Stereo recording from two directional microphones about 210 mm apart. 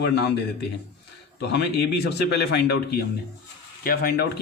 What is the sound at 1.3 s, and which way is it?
A man's voice, 55° left (ahead or behind).